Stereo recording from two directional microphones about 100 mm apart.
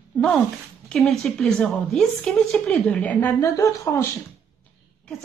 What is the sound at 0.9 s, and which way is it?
A woman's voice, 5° left (ahead or behind).